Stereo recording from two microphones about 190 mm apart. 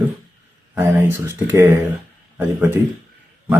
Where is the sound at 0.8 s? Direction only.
10° right (ahead or behind).